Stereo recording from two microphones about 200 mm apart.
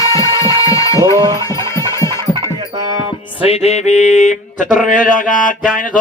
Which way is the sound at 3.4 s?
30° left (ahead or behind).